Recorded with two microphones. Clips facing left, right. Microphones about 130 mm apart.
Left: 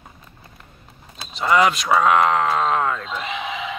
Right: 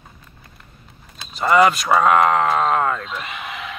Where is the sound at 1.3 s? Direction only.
Centre (ahead or behind).